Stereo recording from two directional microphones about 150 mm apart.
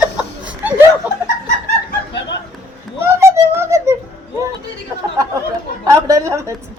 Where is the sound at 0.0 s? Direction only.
5° right (ahead or behind).